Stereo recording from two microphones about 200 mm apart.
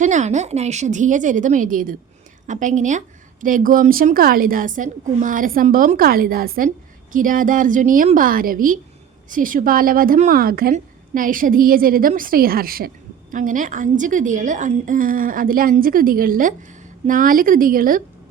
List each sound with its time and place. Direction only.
0.0 s a woman's voice: 35° right (ahead or behind)